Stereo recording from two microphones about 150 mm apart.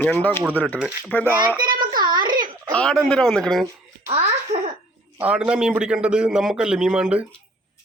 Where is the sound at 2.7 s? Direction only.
5° left (ahead or behind).